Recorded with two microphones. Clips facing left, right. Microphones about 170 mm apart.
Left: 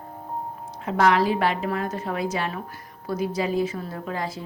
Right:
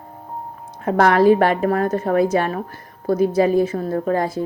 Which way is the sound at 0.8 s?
50° right (ahead or behind).